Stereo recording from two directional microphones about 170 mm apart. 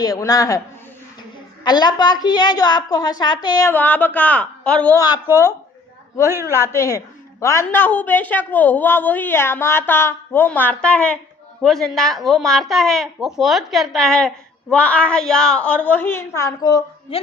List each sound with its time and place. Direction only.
0.0 s a woman's voice: 20° left (ahead or behind)
1.6 s a woman's voice: 25° left (ahead or behind); by 4.9 s 5° left (ahead or behind)
4.9 s a woman's voice: 20° left (ahead or behind)
6.2 s a man's voice: 15° right (ahead or behind)
6.7 s a woman's voice: 15° left (ahead or behind)